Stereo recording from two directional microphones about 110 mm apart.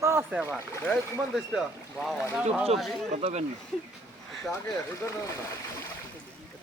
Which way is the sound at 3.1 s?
80° right.